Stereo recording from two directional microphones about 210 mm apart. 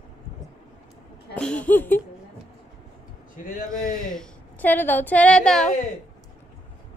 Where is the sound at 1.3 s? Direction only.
5° left (ahead or behind).